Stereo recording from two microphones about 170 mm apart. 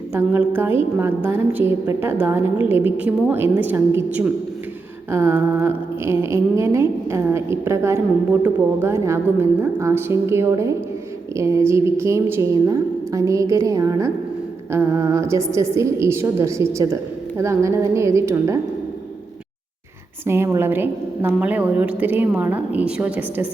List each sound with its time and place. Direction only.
0.1 s a woman's voice: 15° right (ahead or behind)
20.2 s a woman's voice: 15° right (ahead or behind)